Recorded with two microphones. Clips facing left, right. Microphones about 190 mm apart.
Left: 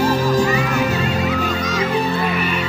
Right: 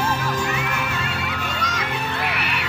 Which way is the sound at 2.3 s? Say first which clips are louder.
Left 7 dB; 75° right (ahead or behind).